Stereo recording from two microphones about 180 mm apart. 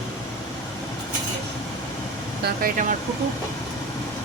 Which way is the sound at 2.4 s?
50° right (ahead or behind).